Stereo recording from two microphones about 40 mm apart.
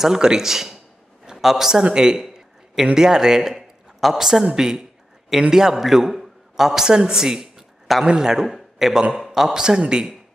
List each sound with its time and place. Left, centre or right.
0.0 s a man's voice: centre
1.7 s a man's voice: centre
4.6 s a man's voice: centre
8.5 s a man's voice: centre